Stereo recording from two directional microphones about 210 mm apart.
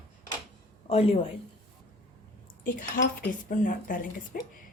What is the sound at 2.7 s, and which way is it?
Speech, 40° left (ahead or behind).